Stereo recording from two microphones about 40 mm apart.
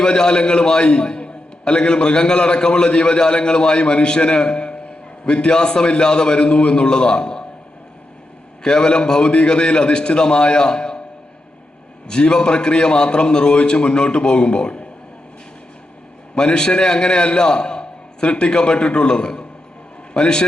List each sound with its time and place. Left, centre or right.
0.0 s a man's voice: centre
8.6 s a man's voice: left
12.0 s a man's voice: centre
16.3 s a man's voice: left